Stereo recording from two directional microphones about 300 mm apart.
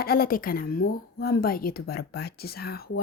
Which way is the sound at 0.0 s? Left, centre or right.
Left.